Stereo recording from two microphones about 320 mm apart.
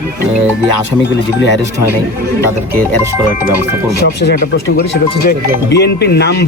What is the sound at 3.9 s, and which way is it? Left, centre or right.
Speech, left.